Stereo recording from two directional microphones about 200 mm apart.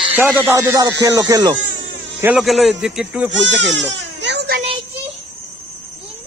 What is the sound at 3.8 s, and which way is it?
Baby cry, 60° right (ahead or behind).